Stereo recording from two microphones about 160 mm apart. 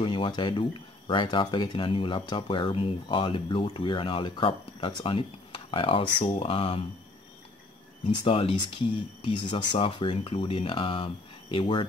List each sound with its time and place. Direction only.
0.0 s speech: 30° left (ahead or behind)
8.1 s speech: 30° left (ahead or behind)